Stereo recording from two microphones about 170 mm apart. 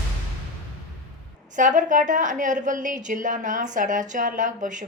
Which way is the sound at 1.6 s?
50° right (ahead or behind).